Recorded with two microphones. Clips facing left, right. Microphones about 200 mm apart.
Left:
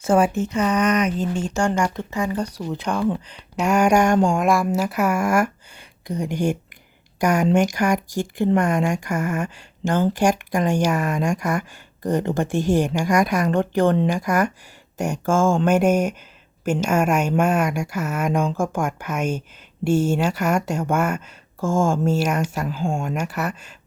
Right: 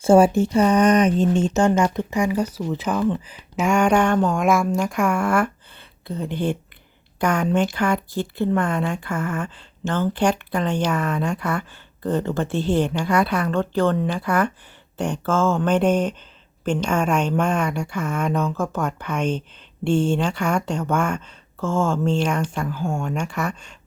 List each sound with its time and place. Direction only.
0.0 s speech: 30° right (ahead or behind); by 4.4 s 10° left (ahead or behind)
4.4 s speech: centre (ahead or behind)
22.8 s speech: 25° left (ahead or behind)
23.0 s speech: 5° left (ahead or behind)